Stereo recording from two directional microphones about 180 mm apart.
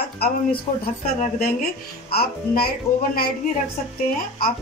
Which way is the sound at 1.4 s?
55° left (ahead or behind).